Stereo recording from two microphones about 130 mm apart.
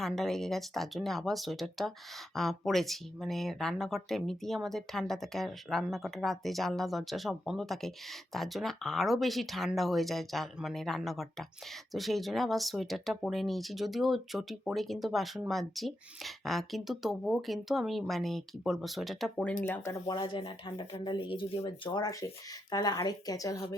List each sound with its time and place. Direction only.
0.0 s speech: 5° left (ahead or behind)
19.6 s speech: 20° left (ahead or behind); by 21.7 s 45° left (ahead or behind)
21.8 s speech: 30° left (ahead or behind)